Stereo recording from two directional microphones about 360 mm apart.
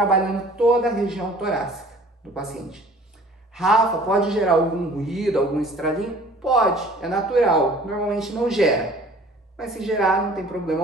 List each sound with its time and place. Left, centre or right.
0.0 s a man's voice: centre